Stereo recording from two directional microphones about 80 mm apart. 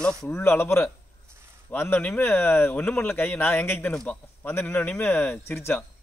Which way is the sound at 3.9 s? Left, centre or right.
Centre.